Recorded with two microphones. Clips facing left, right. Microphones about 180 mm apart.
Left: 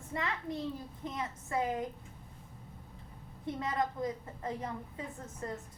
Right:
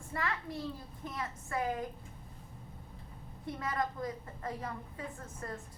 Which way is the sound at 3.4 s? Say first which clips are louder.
Left 2 dB; 20° left (ahead or behind).